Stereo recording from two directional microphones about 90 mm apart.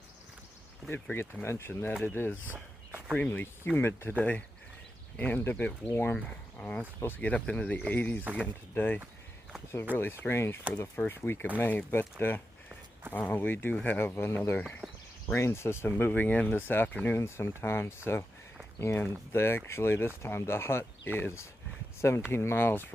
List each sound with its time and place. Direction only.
1.1 s speech: 30° left (ahead or behind)
4.2 s speech: 15° left (ahead or behind)
6.1 s speech: 15° left (ahead or behind)
12.2 s a sound: 20° left (ahead or behind)
13.1 s speech: 20° left (ahead or behind)
14.8 s a sound: 5° right (ahead or behind)
15.3 s speech: 30° left (ahead or behind)
17.2 s speech: 30° left (ahead or behind)